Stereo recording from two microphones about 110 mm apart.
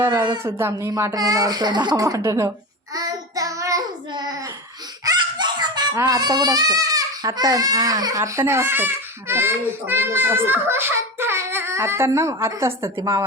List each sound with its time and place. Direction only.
0.1 s a sound: 40° right (ahead or behind)
0.4 s speech: 25° right (ahead or behind)
5.0 s fowl: 40° right (ahead or behind)
6.1 s speech: 40° right (ahead or behind)